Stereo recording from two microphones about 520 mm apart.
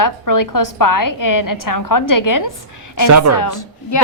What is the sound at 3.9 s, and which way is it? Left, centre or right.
Speech, left.